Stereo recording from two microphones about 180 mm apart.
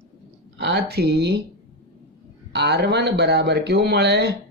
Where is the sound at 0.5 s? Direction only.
70° right (ahead or behind).